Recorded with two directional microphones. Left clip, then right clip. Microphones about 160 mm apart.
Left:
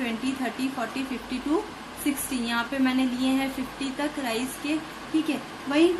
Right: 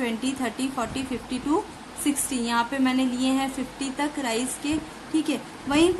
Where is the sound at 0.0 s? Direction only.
20° right (ahead or behind).